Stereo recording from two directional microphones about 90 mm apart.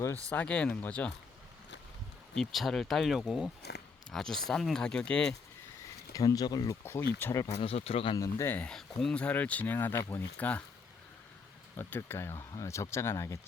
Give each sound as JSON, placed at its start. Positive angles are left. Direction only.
{"t": 0.3, "sound": "speech", "side_deg": 15}
{"t": 2.3, "sound": "speech", "side_deg": 5}
{"t": 6.1, "sound": "speech", "side_deg": 45}
{"t": 6.8, "sound": "speech", "side_deg": 25}
{"t": 7.4, "sound": "speech", "side_deg": 90}
{"t": 8.4, "sound": "speech", "side_deg": 25}
{"t": 8.6, "sound": "speech", "side_deg": 5}
{"t": 11.8, "sound": "speech", "side_deg": 25}